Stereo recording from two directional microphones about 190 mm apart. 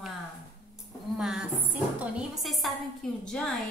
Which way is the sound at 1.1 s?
5° right (ahead or behind).